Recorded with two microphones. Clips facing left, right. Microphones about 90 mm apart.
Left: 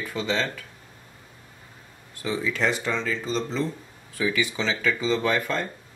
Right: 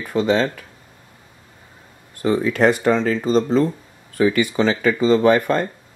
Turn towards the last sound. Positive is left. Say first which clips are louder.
# right 9 dB
turn(degrees=-55)  # may be behind; listen again after turning